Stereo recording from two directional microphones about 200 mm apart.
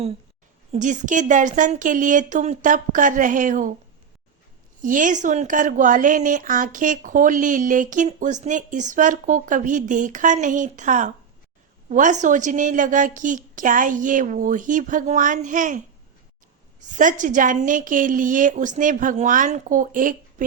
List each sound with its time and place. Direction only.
0.7 s speech: 40° right (ahead or behind)
4.8 s speech: 40° right (ahead or behind)
16.8 s speech: 40° right (ahead or behind)